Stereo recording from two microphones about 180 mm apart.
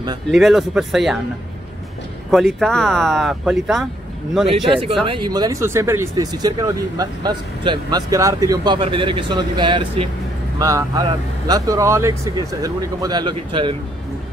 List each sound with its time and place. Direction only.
0.3 s speech: centre (ahead or behind)
2.3 s speech: centre (ahead or behind)
4.6 s speech: 30° right (ahead or behind)